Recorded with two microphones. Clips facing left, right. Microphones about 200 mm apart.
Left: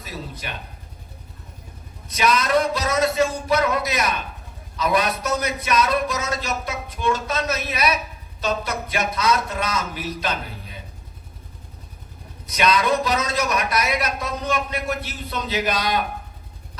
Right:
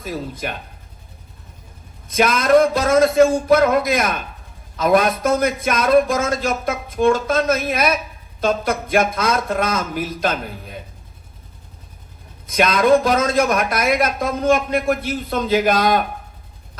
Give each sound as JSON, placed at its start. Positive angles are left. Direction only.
{"t": 0.0, "sound": "speech", "side_deg": -50}
{"t": 2.0, "sound": "speech", "side_deg": -50}
{"t": 12.5, "sound": "speech", "side_deg": -50}